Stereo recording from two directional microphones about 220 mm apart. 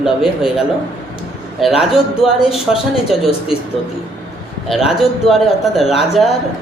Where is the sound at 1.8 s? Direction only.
Centre (ahead or behind).